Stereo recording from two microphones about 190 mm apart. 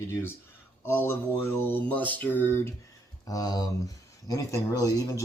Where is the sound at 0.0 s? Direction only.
10° left (ahead or behind).